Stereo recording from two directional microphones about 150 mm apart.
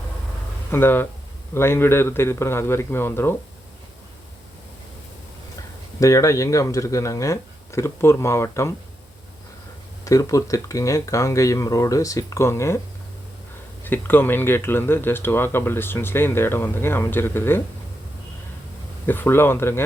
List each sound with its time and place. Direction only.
0.7 s speech: 15° left (ahead or behind)
6.0 s speech: 20° left (ahead or behind)
10.0 s speech: 20° left (ahead or behind)
13.8 s speech: 15° left (ahead or behind)
19.0 s speech: 15° left (ahead or behind)